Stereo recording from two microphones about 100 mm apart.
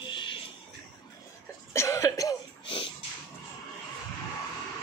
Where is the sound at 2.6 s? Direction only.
55° left (ahead or behind).